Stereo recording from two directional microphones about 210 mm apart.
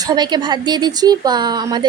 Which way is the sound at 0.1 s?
20° right (ahead or behind).